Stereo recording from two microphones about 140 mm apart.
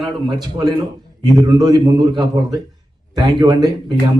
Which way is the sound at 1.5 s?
30° right (ahead or behind).